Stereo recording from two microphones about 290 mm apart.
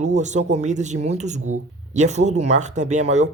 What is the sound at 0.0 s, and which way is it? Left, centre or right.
Speech, right.